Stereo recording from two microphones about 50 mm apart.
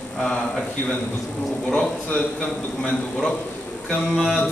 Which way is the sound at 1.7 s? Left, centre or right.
Centre.